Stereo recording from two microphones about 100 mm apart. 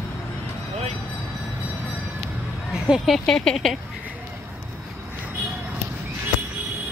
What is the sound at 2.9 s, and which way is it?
Speech, centre (ahead or behind).